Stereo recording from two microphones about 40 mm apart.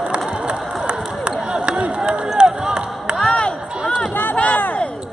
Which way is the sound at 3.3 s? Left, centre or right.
Left.